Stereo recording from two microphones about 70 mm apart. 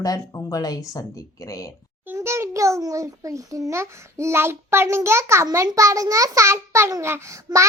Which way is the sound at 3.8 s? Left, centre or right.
Right.